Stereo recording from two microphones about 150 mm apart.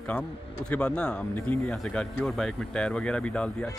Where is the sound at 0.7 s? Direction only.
5° left (ahead or behind).